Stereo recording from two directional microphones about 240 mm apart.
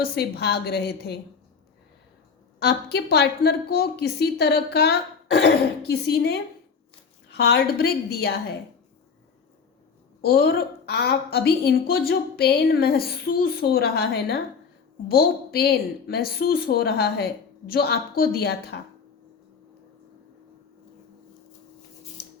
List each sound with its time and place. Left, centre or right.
0.0 s a woman's voice: left
2.6 s a woman's voice: left
10.2 s a woman's voice: left